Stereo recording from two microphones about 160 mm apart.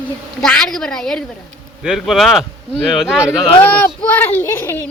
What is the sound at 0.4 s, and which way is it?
A woman's voice, 5° left (ahead or behind).